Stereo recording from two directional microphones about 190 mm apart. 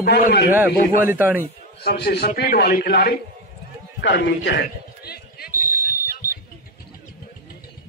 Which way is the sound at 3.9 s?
65° left (ahead or behind).